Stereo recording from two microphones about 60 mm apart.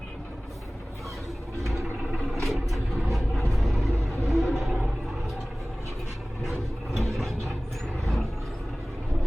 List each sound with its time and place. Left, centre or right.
2.3 s vehicle: centre
6.4 s a sound: centre
8.0 s vehicle: centre